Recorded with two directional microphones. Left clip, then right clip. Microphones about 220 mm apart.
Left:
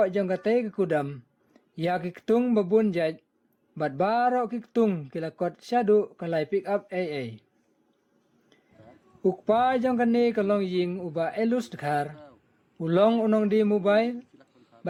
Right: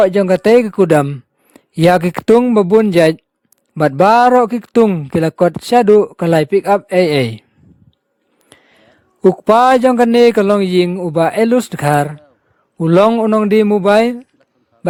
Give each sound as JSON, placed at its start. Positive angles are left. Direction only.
{"t": 0.0, "sound": "speech", "side_deg": -50}
{"t": 8.5, "sound": "a sound", "side_deg": -50}
{"t": 9.2, "sound": "speech", "side_deg": -50}